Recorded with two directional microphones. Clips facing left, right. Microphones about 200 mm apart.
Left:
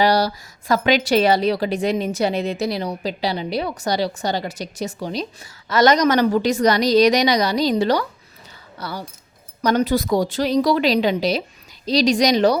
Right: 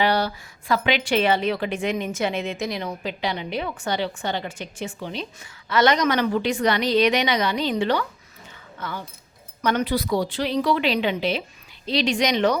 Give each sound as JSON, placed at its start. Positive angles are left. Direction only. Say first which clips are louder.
{"t": 0.0, "sound": "a woman's voice", "louder": "left 4 dB", "side_deg": 40}